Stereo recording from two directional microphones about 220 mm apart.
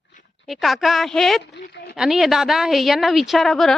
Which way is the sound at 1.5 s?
50° left (ahead or behind).